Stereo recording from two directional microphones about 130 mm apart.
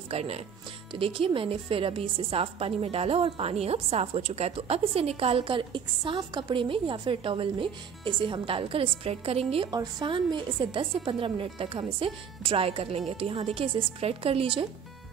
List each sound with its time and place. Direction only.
0.1 s a woman's voice: 55° right (ahead or behind)
9.7 s a woman's voice: 30° right (ahead or behind)